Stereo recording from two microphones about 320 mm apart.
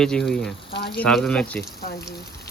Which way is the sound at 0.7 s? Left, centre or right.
Left.